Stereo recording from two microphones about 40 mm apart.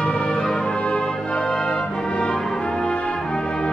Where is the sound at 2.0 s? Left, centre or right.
Left.